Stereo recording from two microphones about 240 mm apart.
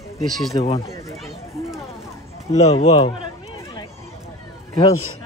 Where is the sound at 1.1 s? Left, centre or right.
Centre.